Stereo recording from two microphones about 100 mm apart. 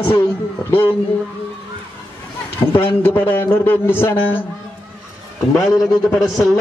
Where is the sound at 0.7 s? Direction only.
65° left (ahead or behind).